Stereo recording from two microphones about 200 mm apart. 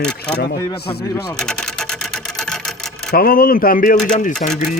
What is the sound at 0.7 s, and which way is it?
Speech, 55° left (ahead or behind).